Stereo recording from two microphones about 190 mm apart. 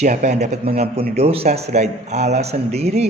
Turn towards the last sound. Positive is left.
turn(degrees=-35)  # may be behind; listen again after turning